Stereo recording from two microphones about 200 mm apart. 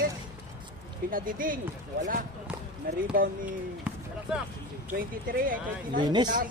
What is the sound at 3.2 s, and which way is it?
Speech, 45° right (ahead or behind).